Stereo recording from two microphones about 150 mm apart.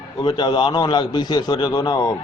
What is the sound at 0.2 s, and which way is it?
A man's voice, 30° left (ahead or behind).